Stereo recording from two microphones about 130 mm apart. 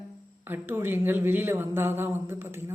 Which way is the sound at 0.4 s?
15° right (ahead or behind).